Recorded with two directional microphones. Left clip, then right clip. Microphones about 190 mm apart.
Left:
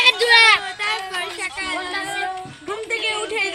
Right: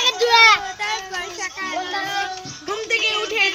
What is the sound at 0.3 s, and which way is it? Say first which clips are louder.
Child singing: right 2 dB; 30° left (ahead or behind).